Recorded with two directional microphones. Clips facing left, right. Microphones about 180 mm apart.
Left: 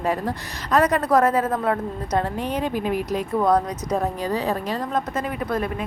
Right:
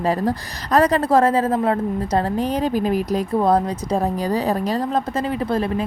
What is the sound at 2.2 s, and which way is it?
Speech, 35° right (ahead or behind).